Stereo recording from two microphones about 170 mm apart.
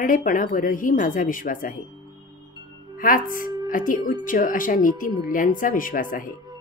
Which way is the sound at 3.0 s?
55° left (ahead or behind).